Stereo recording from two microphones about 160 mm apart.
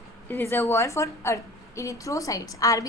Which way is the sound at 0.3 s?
15° left (ahead or behind).